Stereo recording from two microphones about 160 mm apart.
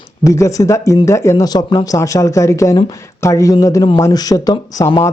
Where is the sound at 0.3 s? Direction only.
20° left (ahead or behind).